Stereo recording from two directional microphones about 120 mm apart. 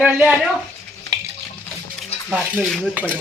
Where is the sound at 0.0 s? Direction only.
10° right (ahead or behind).